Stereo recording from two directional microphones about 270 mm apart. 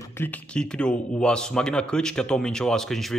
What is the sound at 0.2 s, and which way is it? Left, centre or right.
A man's voice, centre.